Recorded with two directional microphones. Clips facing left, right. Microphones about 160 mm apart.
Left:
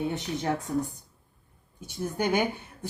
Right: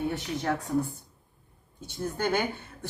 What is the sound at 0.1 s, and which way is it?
Speech, 20° left (ahead or behind).